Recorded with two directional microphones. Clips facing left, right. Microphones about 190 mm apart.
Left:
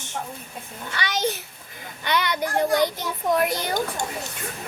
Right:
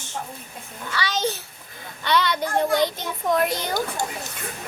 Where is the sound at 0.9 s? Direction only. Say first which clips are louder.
Right 1 dB; 20° left (ahead or behind).